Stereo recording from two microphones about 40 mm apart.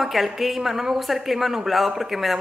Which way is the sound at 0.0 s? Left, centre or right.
Centre.